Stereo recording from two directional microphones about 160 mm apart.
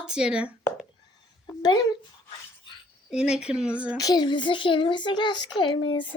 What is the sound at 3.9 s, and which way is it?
Speech, 25° left (ahead or behind).